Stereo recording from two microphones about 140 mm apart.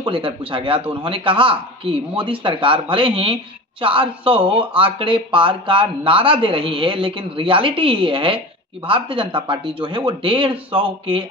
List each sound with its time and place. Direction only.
0.0 s speech: 40° right (ahead or behind)